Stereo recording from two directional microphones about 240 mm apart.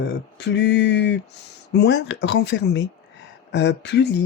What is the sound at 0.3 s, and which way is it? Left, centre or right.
Speech, left.